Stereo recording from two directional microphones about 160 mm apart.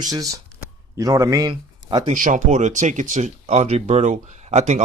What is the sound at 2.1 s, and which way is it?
Speech, 55° right (ahead or behind).